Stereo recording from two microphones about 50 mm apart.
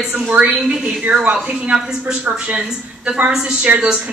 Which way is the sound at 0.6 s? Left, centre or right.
Centre.